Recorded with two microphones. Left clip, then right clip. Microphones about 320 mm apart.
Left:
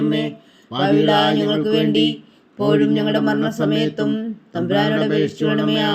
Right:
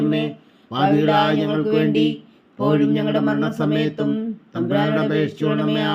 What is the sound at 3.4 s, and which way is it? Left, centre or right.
Music, centre.